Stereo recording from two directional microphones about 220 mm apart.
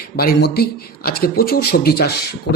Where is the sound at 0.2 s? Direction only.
45° left (ahead or behind).